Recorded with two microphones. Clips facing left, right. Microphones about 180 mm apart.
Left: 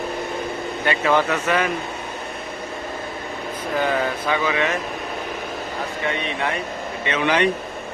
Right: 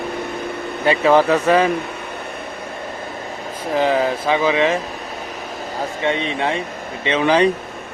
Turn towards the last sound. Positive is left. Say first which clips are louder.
# right 4 dB
turn(degrees=-30)  # may be behind; listen again after turning